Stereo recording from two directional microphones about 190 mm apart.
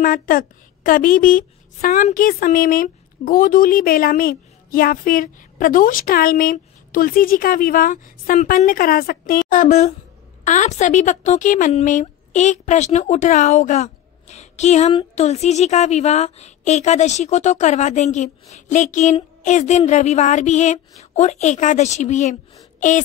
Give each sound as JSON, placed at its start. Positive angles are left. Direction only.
{"t": 0.0, "sound": "a woman's voice", "side_deg": 45}